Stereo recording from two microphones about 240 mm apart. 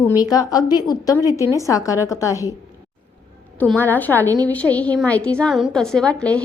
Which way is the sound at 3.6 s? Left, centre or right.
Centre.